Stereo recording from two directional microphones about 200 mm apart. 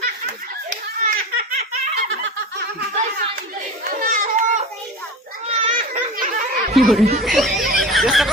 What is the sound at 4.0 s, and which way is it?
Children playing, 45° right (ahead or behind).